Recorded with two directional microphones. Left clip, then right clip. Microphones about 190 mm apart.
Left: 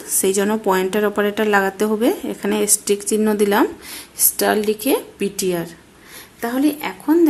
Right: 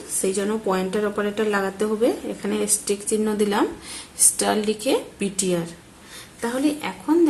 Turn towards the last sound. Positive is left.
turn(degrees=35)  # may be behind; listen again after turning